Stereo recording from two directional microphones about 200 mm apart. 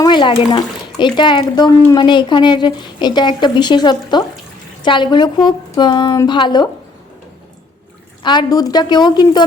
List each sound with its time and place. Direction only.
0.0 s speech: 25° left (ahead or behind)
8.2 s speech: 20° left (ahead or behind)